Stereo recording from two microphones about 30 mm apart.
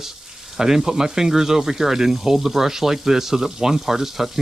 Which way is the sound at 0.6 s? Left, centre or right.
Centre.